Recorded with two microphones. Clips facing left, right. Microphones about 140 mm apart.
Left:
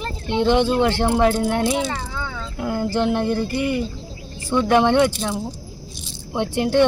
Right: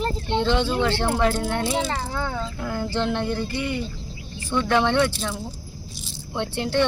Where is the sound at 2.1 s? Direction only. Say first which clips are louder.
Right 3 dB; 45° right (ahead or behind).